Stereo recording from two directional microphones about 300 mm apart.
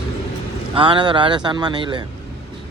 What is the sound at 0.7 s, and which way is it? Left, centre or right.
Speech, centre.